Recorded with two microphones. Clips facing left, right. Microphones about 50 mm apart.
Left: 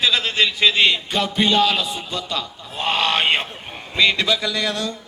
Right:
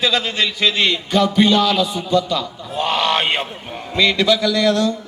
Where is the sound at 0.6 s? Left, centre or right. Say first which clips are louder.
Left 1 dB; centre.